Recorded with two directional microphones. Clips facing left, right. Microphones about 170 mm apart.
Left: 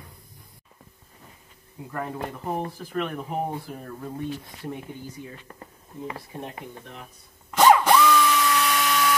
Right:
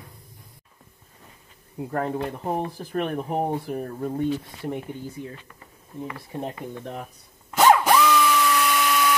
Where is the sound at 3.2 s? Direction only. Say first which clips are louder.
Right 4 dB; 20° right (ahead or behind).